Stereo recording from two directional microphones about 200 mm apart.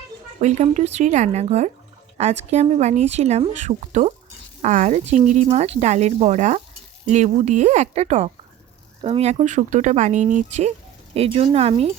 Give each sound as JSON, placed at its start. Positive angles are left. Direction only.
{"t": 0.3, "sound": "speech", "side_deg": -35}